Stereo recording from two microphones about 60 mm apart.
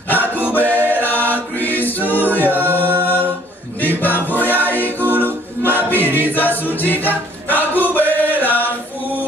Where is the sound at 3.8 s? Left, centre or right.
Left.